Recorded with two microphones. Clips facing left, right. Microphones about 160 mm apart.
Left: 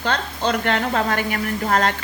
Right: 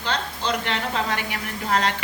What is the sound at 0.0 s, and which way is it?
Speech, 50° left (ahead or behind).